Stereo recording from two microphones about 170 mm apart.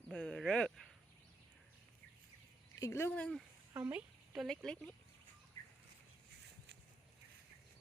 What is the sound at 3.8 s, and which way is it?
Speech, 15° right (ahead or behind).